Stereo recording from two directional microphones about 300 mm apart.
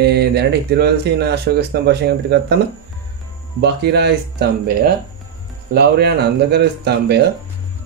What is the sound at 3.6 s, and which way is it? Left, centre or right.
Speech, right.